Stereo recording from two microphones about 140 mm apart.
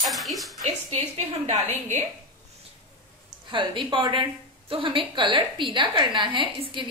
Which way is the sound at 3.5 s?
35° right (ahead or behind).